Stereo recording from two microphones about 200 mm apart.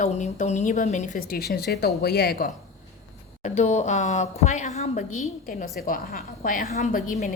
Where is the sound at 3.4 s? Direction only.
35° left (ahead or behind).